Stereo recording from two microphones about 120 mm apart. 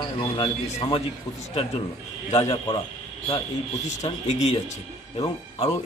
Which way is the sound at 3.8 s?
65° left (ahead or behind).